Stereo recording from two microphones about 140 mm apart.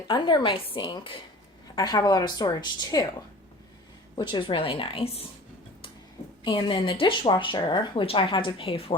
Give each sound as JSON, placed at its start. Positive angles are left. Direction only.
{"t": 0.1, "sound": "a woman's voice", "side_deg": 35}
{"t": 4.1, "sound": "speech", "side_deg": 35}
{"t": 6.4, "sound": "speech", "side_deg": 35}